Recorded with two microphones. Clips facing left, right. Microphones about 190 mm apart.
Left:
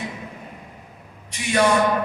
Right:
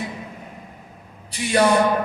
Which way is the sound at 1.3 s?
30° right (ahead or behind).